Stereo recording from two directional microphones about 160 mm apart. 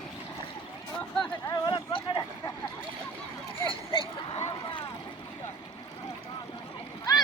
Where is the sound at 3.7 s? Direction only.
35° left (ahead or behind).